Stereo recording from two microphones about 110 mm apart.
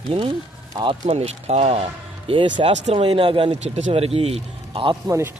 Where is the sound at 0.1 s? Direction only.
50° right (ahead or behind).